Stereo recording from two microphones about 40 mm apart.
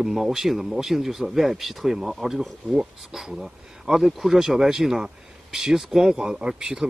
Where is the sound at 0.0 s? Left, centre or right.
Centre.